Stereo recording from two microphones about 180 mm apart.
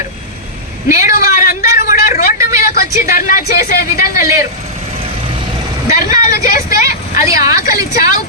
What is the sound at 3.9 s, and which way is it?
Speech, 15° right (ahead or behind).